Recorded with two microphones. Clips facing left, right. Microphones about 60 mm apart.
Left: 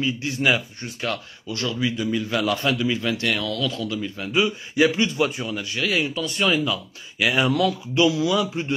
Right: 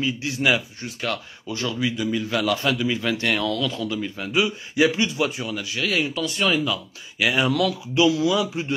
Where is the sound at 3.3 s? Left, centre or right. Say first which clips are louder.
Right 2 dB; right.